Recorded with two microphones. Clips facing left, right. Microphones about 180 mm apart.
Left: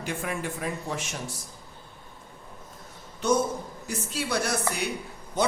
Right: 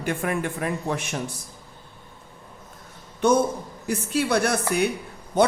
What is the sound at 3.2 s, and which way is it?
Speech, 55° right (ahead or behind).